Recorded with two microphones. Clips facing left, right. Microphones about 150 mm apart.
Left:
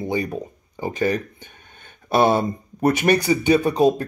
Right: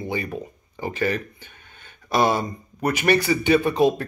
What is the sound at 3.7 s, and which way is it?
Speech, 40° left (ahead or behind).